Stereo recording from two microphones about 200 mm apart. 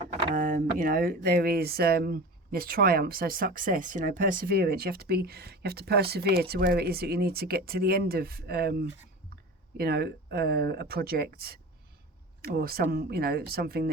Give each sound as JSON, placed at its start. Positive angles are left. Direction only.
{"t": 0.3, "sound": "speech", "side_deg": -40}